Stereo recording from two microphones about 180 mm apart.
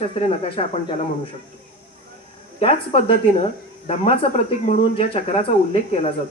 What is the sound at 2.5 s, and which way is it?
Speech, 30° left (ahead or behind).